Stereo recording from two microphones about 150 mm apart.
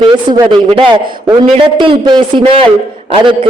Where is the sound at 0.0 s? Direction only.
30° right (ahead or behind).